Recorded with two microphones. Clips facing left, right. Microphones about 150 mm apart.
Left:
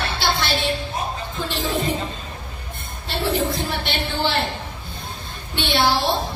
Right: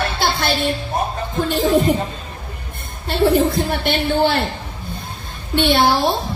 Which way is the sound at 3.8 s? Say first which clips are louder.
Right 10 dB; 55° right (ahead or behind).